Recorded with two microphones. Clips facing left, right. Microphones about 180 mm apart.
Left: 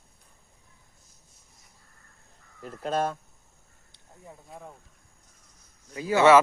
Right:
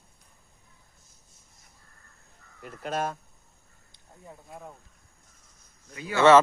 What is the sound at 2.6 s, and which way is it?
Speech, 30° left (ahead or behind).